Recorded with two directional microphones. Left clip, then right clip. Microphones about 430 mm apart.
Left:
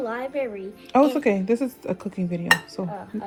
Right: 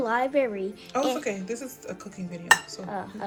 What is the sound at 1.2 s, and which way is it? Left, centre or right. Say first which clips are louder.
Speech: left 10 dB; centre.